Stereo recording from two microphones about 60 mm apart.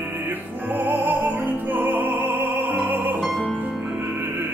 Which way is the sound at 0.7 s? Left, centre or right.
Right.